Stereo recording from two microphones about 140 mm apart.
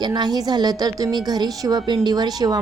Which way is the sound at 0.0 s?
30° right (ahead or behind).